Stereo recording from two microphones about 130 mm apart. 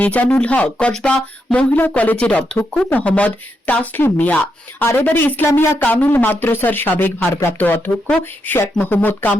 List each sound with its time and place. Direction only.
0.0 s speech: 10° left (ahead or behind)